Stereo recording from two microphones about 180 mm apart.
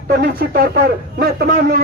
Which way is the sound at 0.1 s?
55° right (ahead or behind).